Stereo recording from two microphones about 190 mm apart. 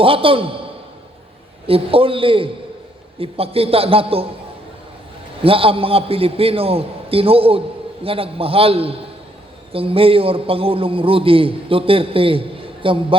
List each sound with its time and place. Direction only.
0.0 s a man's voice: 30° right (ahead or behind)
1.6 s a man's voice: 30° right (ahead or behind)
5.4 s a man's voice: 30° right (ahead or behind)